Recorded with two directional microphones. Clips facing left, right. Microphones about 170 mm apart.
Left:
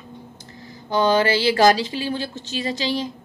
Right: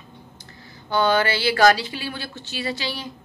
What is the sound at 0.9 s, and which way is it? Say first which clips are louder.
A woman's voice: left 2 dB; 35° left (ahead or behind).